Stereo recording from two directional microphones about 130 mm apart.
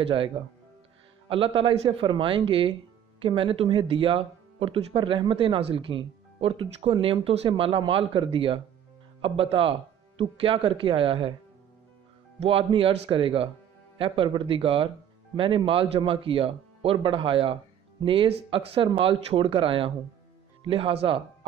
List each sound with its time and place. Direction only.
0.0 s speech: 45° right (ahead or behind)
1.3 s speech: 45° right (ahead or behind)
12.4 s speech: 45° right (ahead or behind)